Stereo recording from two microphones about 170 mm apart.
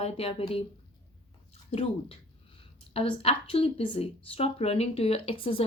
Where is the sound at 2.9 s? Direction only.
35° left (ahead or behind).